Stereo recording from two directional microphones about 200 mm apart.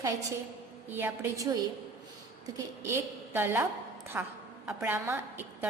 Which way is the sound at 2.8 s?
10° right (ahead or behind).